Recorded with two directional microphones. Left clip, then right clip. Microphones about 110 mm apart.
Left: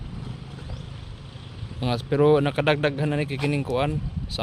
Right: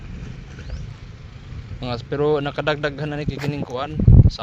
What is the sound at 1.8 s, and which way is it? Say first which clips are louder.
A man's voice: left 1 dB; 50° left (ahead or behind).